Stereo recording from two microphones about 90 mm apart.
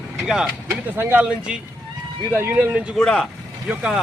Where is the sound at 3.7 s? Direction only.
10° right (ahead or behind).